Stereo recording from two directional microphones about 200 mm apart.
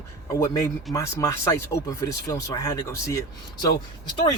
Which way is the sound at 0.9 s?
15° left (ahead or behind).